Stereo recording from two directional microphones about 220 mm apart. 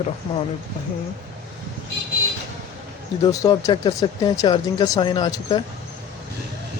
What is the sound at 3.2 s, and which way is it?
Speech, 15° left (ahead or behind).